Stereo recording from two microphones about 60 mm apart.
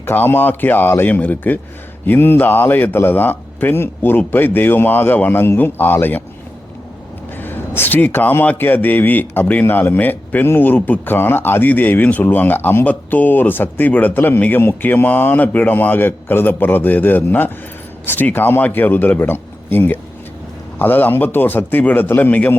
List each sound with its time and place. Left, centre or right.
0.0 s a man's voice: left
7.3 s a sound: left
8.5 s a man's voice: left